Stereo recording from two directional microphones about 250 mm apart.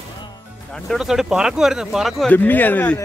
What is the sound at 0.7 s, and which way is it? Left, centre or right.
Speech, centre.